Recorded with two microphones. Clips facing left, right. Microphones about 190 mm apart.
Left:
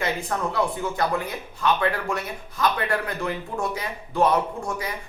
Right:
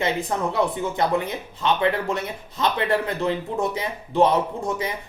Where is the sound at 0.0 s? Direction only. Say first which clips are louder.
Right 3 dB; 20° right (ahead or behind).